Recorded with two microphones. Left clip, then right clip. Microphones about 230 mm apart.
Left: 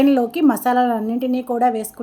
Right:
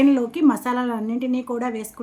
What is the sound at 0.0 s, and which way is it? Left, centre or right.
A woman's voice, centre.